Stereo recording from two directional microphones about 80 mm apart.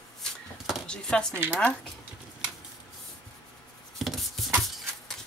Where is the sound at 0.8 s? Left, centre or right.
Centre.